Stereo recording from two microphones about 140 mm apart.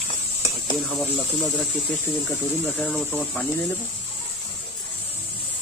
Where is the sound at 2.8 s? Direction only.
10° left (ahead or behind).